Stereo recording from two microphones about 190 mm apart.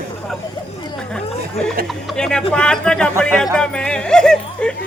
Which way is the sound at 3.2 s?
5° left (ahead or behind).